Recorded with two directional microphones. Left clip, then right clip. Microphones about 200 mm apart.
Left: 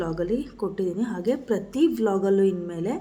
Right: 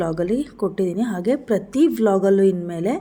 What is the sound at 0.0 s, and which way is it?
A woman's voice, 30° right (ahead or behind).